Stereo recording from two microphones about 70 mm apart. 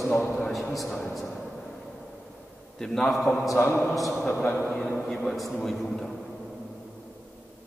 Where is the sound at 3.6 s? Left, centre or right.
Left.